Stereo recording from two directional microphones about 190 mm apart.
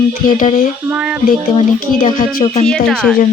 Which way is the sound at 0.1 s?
45° left (ahead or behind).